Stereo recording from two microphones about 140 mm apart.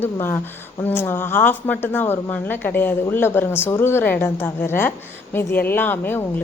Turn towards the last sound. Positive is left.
turn(degrees=15)  # may be behind; listen again after turning